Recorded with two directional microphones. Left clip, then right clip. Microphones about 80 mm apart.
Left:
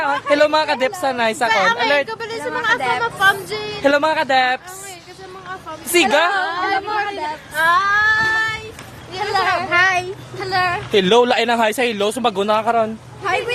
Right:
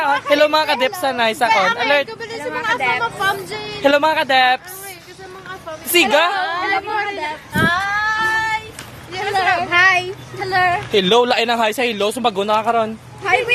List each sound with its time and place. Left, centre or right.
0.3 s speech: left
1.5 s a woman's voice: left
2.0 s a sound: left
2.6 s speech: left
3.8 s speech: left
5.9 s speech: left
7.5 s child singing: left
7.8 s child singing: left
9.1 s a man's voice: left
9.6 s speech: centre
10.3 s speech: left
10.9 s a woman's voice: left
11.3 s speech: left
12.6 s speech: left